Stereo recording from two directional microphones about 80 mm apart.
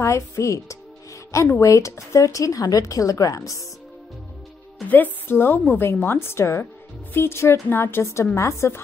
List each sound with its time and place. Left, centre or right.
0.0 s a woman's voice: left
4.8 s a woman's voice: left